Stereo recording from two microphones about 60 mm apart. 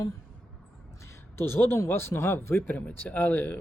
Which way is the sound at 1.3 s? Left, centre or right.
Left.